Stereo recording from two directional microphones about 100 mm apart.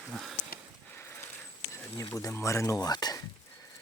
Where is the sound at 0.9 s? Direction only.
25° left (ahead or behind).